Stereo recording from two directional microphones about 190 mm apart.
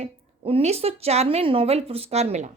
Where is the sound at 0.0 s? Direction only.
30° right (ahead or behind).